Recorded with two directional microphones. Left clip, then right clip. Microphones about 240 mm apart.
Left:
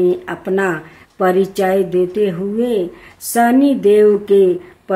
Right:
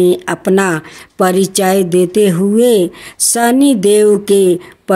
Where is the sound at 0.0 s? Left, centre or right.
Right.